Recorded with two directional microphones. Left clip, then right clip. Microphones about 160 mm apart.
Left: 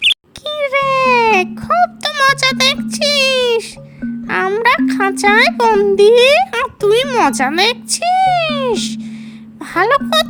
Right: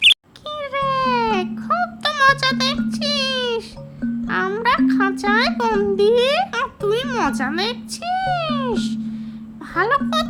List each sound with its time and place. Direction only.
0.4 s music: 45° left (ahead or behind)
6.1 s speech: 50° left (ahead or behind)
6.5 s a sound: 40° left (ahead or behind)
9.7 s speech: 50° left (ahead or behind)